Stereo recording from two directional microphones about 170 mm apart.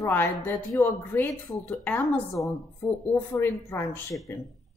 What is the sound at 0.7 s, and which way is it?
A woman's voice, 5° left (ahead or behind).